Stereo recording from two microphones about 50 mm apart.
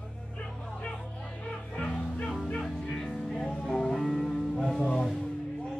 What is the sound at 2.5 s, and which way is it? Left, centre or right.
Music, centre.